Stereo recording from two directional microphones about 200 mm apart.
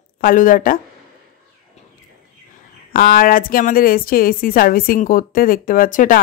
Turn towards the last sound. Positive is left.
turn(degrees=45)  # may be behind; listen again after turning